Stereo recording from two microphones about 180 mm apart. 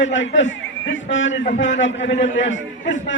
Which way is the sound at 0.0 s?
90° left.